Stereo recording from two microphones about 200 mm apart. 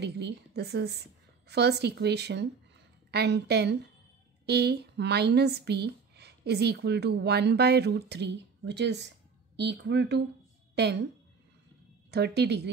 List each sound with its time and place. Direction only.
0.0 s speech: 55° right (ahead or behind)
12.1 s speech: 55° right (ahead or behind)